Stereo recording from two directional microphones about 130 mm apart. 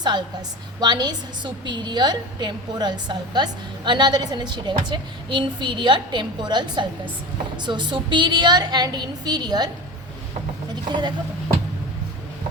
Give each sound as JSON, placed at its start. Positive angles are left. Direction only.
{"t": 0.0, "sound": "a woman's voice", "side_deg": -35}
{"t": 10.8, "sound": "a woman's voice", "side_deg": -35}